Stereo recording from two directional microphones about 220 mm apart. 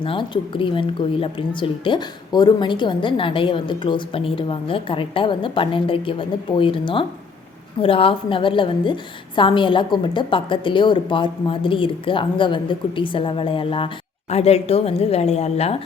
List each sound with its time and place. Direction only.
0.0 s a woman's voice: 25° left (ahead or behind)